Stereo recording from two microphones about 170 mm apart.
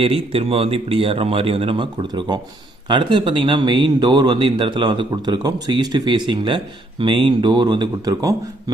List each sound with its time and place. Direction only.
0.0 s speech: 35° right (ahead or behind)